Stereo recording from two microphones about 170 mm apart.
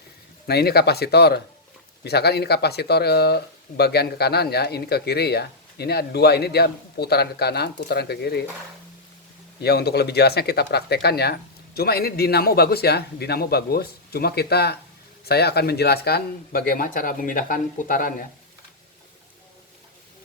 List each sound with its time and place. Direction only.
0.4 s speech: 70° left (ahead or behind)
9.6 s speech: 70° left (ahead or behind); by 18.3 s 55° left (ahead or behind)